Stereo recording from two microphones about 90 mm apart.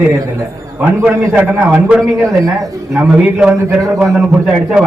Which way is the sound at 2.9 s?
15° right (ahead or behind).